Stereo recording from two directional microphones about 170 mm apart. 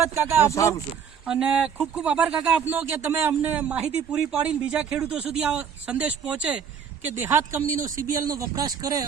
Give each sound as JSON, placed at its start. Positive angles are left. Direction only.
{"t": 0.0, "sound": "speech", "side_deg": -15}
{"t": 0.4, "sound": "speech", "side_deg": 20}
{"t": 1.2, "sound": "speech", "side_deg": -5}